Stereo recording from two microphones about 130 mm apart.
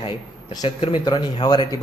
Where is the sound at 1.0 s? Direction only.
35° left (ahead or behind).